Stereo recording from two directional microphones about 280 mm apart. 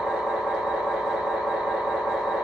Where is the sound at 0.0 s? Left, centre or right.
Centre.